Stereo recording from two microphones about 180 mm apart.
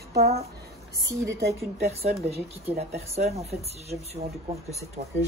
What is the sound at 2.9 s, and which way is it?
Speech, 35° right (ahead or behind).